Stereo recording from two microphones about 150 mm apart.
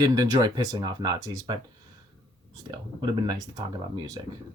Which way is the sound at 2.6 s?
30° right (ahead or behind).